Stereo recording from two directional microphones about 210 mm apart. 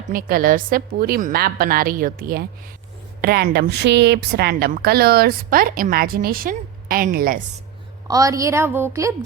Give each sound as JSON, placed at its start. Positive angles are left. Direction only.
{"t": 0.1, "sound": "a woman's voice", "side_deg": -40}
{"t": 8.0, "sound": "a woman's voice", "side_deg": -15}